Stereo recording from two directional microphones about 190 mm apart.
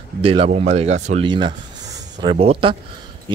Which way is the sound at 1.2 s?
25° right (ahead or behind).